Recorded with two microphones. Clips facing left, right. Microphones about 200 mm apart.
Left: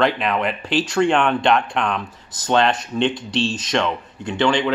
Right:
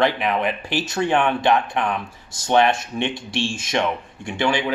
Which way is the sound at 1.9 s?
20° right (ahead or behind).